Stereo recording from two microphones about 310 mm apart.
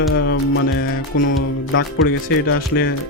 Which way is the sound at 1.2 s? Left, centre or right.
Left.